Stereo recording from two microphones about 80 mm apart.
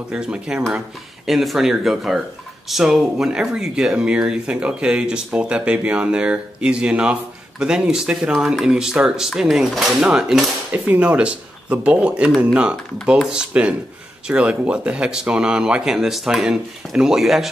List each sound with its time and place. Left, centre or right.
0.1 s speech: centre